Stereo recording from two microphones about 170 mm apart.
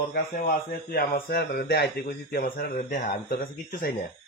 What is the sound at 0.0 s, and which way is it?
Speech, 55° left (ahead or behind).